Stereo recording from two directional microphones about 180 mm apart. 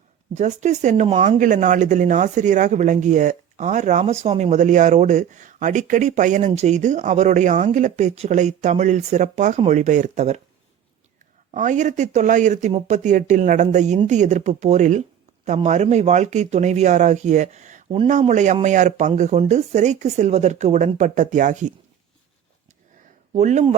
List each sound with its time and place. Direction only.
0.3 s speech: 40° right (ahead or behind)
11.5 s speech: 45° right (ahead or behind)
23.3 s speech: 40° right (ahead or behind)